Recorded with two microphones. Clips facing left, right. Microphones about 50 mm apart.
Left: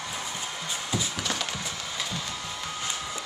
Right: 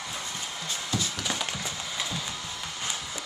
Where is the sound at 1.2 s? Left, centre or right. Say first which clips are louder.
Left 1 dB; centre.